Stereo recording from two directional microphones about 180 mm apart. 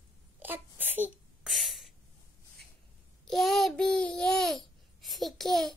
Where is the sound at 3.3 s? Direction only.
Centre (ahead or behind).